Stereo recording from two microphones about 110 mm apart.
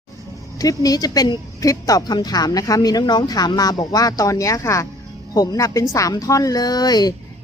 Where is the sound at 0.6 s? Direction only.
35° left (ahead or behind).